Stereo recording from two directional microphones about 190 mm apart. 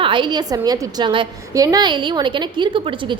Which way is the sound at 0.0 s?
25° right (ahead or behind).